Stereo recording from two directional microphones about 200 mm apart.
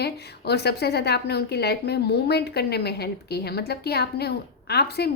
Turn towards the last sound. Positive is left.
turn(degrees=55)  # may be behind; listen again after turning